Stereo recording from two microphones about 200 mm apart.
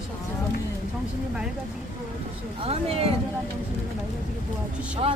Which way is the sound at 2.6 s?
30° right (ahead or behind).